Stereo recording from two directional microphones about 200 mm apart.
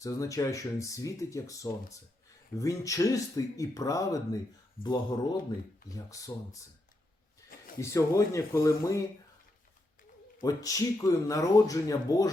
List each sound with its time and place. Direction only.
0.0 s speech: 15° left (ahead or behind)
7.8 s speech: 15° left (ahead or behind)
10.4 s speech: 15° left (ahead or behind)